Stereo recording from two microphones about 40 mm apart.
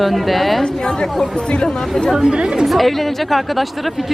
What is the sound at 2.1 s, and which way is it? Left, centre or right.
Speech, centre.